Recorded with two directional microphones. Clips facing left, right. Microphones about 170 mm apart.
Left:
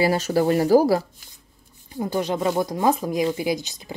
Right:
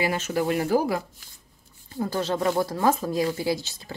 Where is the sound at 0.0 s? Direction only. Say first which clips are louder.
Left 5 dB; 35° left (ahead or behind).